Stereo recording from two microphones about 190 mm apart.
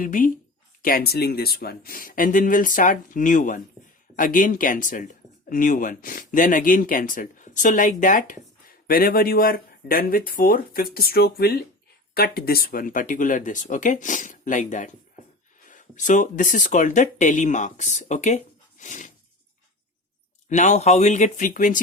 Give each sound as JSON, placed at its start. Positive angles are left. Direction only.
{"t": 0.0, "sound": "speech", "side_deg": 45}
{"t": 20.5, "sound": "speech", "side_deg": 40}